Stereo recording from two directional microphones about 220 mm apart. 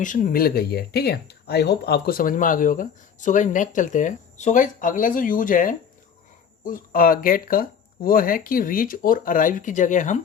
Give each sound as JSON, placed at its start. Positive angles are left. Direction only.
{"t": 0.0, "sound": "speech", "side_deg": 35}